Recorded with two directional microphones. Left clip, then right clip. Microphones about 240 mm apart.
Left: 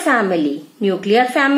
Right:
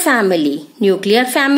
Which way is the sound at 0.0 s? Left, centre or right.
Right.